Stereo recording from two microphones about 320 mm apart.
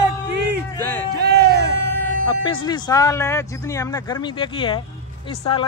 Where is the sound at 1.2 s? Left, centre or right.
Right.